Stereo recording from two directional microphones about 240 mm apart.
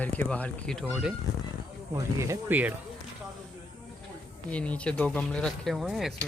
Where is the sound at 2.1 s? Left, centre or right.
Centre.